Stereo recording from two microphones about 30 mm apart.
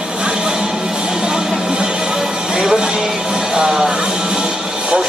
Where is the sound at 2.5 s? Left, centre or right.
Centre.